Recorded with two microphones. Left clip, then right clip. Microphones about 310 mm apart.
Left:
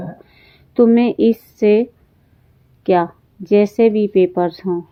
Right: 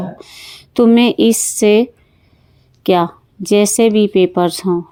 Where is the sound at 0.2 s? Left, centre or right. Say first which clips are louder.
Right 12 dB; right.